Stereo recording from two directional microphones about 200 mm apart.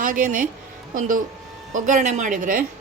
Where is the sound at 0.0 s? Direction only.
40° right (ahead or behind).